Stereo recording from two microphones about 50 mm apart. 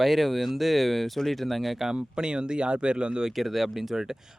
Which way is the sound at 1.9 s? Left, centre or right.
Centre.